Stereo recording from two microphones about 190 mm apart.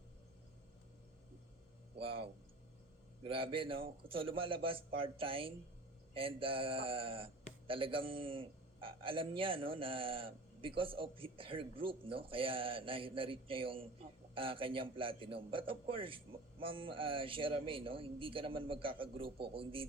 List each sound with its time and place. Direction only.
2.0 s a man's voice: 30° right (ahead or behind)